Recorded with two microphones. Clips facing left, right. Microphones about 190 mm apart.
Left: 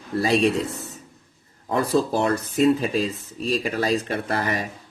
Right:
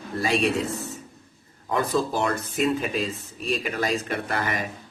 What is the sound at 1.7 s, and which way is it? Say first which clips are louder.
Speech: left 3 dB; 35° left (ahead or behind).